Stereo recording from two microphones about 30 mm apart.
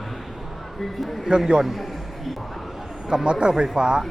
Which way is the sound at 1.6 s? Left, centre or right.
Centre.